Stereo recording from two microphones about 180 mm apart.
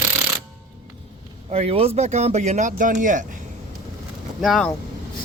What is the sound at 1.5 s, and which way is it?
Speech, 35° right (ahead or behind).